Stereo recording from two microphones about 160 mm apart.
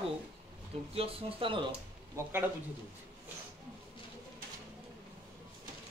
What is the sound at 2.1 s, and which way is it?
Speech, 15° right (ahead or behind).